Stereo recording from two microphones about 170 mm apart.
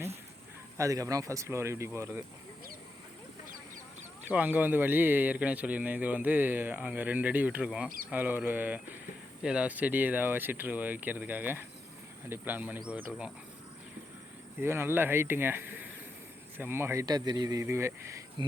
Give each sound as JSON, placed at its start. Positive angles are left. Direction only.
{"t": 0.8, "sound": "speech", "side_deg": -20}
{"t": 4.3, "sound": "speech", "side_deg": -10}
{"t": 14.6, "sound": "speech", "side_deg": -15}
{"t": 18.4, "sound": "speech", "side_deg": -25}